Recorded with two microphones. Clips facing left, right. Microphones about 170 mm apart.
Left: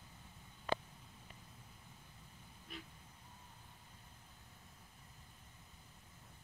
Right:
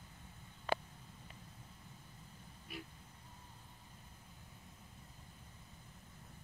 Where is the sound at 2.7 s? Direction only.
10° right (ahead or behind).